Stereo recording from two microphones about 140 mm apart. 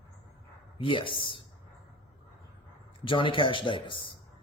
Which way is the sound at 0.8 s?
40° left (ahead or behind).